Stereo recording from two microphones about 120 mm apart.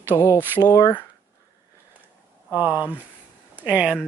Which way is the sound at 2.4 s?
15° right (ahead or behind).